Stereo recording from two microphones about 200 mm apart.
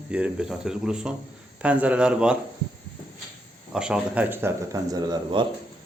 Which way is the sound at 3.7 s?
5° right (ahead or behind).